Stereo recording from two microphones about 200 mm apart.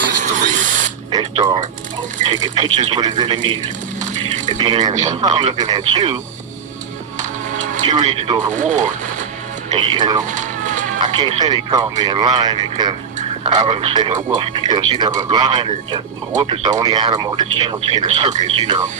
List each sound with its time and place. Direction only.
0.2 s speech: 40° right (ahead or behind)
1.1 s speech: 20° right (ahead or behind)
4.9 s speech: 35° right (ahead or behind)
5.2 s speech: 20° right (ahead or behind)
7.2 s music: 40° right (ahead or behind)
7.9 s speech: 25° right (ahead or behind)
8.5 s speech: 40° right (ahead or behind)
9.7 s speech: 25° right (ahead or behind)
10.2 s a sound: 40° right (ahead or behind)
11.0 s speech: 20° right (ahead or behind)
18.3 s speech: 35° right (ahead or behind)